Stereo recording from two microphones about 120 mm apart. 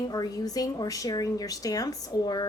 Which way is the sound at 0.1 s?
30° left (ahead or behind).